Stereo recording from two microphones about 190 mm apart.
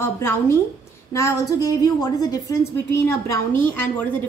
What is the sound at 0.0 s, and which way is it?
A woman's voice, 15° left (ahead or behind).